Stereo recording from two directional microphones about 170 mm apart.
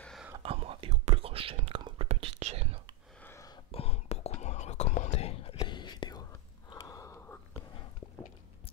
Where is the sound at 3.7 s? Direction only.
40° left (ahead or behind).